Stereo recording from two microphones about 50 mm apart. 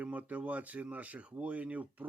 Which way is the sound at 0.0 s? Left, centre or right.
Right.